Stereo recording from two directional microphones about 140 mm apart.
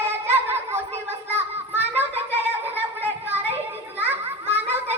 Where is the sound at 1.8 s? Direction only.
15° right (ahead or behind).